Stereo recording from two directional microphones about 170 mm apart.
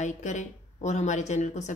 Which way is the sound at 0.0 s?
45° left (ahead or behind).